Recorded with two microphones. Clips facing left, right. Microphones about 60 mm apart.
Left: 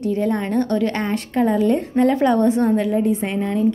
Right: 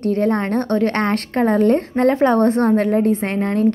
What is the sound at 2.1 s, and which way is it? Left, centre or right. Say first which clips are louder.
Speech: right 4 dB; right.